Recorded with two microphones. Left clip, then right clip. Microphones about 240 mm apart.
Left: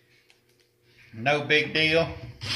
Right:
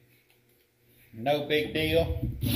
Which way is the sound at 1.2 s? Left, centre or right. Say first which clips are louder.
Left 4 dB; left.